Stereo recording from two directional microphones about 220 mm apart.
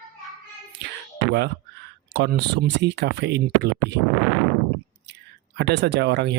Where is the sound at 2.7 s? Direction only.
50° right (ahead or behind).